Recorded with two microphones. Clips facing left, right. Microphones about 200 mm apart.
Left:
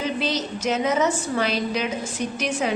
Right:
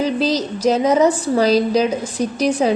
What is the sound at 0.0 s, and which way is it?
A woman's voice, 35° right (ahead or behind).